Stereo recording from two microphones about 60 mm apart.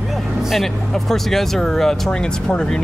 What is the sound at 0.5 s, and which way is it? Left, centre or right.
Speech, centre.